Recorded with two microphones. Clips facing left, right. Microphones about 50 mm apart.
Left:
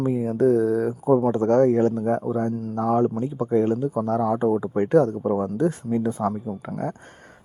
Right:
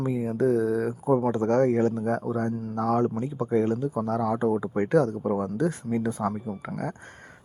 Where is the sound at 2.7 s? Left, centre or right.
Left.